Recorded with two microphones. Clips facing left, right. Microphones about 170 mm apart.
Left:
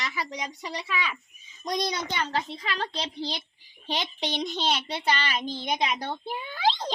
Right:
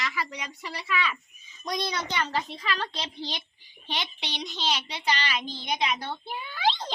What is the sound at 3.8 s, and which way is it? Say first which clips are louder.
A child's voice: left 4 dB; 40° left (ahead or behind).